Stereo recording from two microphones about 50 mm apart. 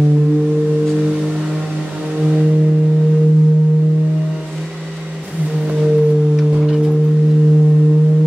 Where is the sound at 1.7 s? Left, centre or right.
Centre.